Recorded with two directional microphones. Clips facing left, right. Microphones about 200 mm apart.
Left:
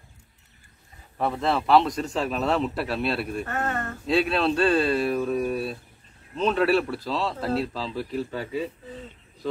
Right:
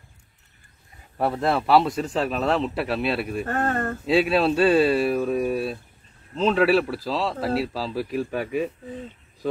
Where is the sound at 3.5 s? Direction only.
35° right (ahead or behind).